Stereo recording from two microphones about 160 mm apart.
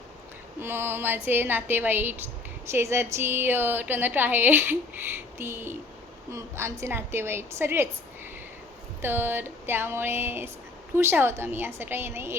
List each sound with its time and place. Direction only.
0.6 s a woman's voice: 15° right (ahead or behind)
9.0 s a woman's voice: 15° right (ahead or behind)